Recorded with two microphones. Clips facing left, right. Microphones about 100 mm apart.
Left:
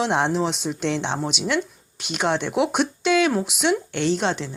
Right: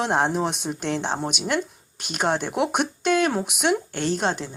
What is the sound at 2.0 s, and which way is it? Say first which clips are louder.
Speech: left 1 dB; 45° right (ahead or behind).